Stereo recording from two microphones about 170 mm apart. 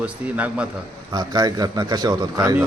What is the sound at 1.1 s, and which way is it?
A man's voice, 25° right (ahead or behind).